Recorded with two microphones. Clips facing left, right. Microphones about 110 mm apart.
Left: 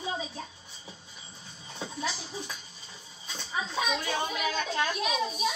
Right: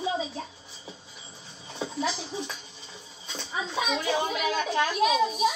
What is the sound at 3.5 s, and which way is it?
A child's voice, 20° right (ahead or behind).